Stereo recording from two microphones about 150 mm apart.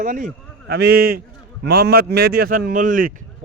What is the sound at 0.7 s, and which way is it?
A man's voice, 90° right.